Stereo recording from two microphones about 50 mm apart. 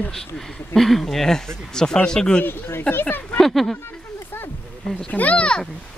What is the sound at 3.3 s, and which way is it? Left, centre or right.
Speech, centre.